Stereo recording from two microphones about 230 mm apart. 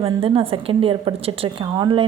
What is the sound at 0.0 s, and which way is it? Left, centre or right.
A woman's voice, right.